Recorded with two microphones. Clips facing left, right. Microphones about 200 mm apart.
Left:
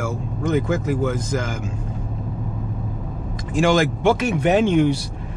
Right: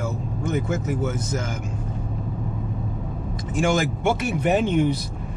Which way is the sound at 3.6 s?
90° left.